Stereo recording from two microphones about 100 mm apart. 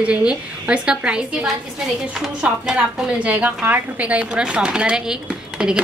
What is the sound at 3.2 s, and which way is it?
A woman's voice, 15° right (ahead or behind).